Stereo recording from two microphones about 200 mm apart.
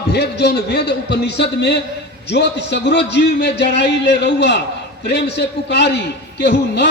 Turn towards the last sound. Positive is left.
turn(degrees=60)  # may be behind; listen again after turning